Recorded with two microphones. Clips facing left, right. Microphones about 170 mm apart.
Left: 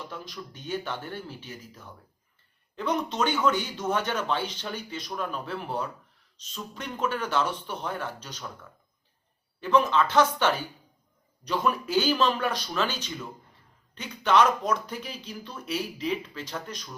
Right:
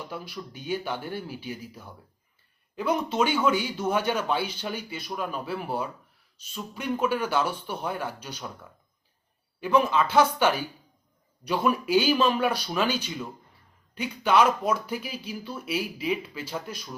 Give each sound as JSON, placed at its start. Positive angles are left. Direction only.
{"t": 0.1, "sound": "speech", "side_deg": -10}
{"t": 9.6, "sound": "speech", "side_deg": -10}